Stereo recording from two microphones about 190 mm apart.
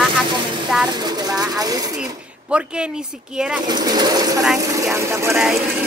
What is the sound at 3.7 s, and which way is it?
Speech, 20° right (ahead or behind).